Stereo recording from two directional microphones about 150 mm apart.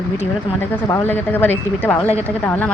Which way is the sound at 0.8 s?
20° left (ahead or behind).